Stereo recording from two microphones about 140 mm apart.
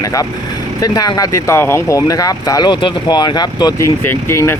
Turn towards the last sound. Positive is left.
turn(degrees=20)  # may be behind; listen again after turning